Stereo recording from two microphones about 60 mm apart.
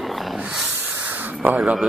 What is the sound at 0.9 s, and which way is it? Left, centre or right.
Spray, right.